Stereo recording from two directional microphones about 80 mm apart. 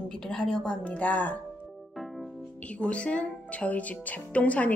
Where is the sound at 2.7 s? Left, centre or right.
Centre.